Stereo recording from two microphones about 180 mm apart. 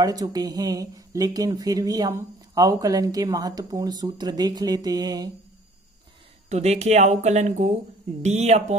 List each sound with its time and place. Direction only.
0.0 s speech: 20° right (ahead or behind)
6.5 s speech: 40° right (ahead or behind)